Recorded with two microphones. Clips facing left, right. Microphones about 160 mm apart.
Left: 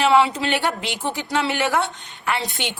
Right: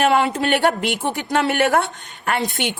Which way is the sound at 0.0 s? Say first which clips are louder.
Even; 50° right (ahead or behind).